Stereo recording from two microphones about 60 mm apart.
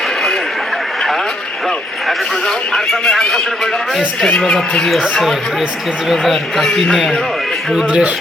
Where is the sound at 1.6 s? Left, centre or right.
Centre.